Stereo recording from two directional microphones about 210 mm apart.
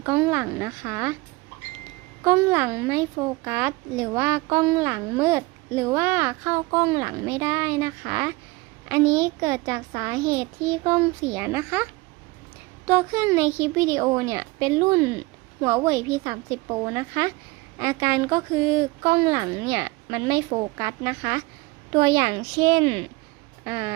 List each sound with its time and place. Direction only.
0.0 s speech: 10° right (ahead or behind)
2.2 s speech: 10° right (ahead or behind)
12.9 s a woman's voice: 10° right (ahead or behind)